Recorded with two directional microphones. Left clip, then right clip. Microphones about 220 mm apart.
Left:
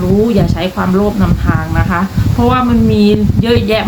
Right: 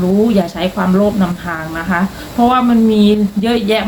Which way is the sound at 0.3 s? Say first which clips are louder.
Left 1 dB; centre (ahead or behind).